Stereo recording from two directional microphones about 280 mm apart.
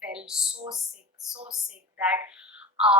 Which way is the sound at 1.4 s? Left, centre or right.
Centre.